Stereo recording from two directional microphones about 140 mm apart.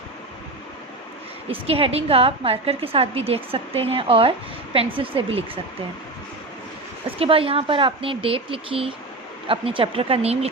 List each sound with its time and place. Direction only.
1.5 s a woman's voice: 40° right (ahead or behind)
7.2 s speech: 40° right (ahead or behind)